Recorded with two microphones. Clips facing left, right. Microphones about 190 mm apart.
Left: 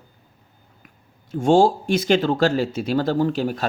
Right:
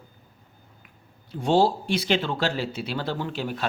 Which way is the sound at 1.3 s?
45° left (ahead or behind).